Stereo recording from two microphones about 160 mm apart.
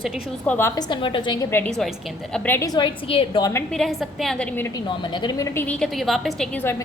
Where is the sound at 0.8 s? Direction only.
30° left (ahead or behind).